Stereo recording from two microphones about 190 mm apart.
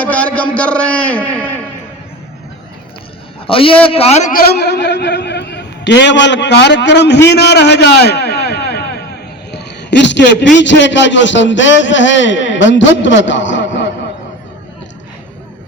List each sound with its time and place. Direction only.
0.0 s a man's voice: 5° left (ahead or behind)
3.4 s a man's voice: 30° left (ahead or behind); by 7.2 s 65° left (ahead or behind)
7.3 s a sound: 60° left (ahead or behind)
9.5 s a man's voice: 65° left (ahead or behind)